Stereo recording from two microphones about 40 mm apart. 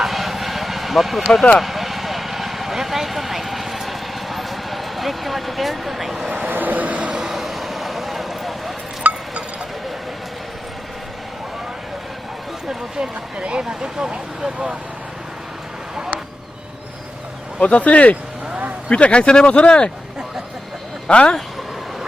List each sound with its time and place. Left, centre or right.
0.0 s vehicle: centre
6.5 s vehicle: right
7.3 s vehicle: centre
9.0 s music: right
13.4 s speech: right
17.6 s speech: left
21.1 s speech: left